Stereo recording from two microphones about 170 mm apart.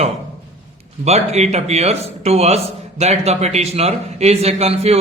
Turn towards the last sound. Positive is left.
turn(degrees=-35)  # may be behind; listen again after turning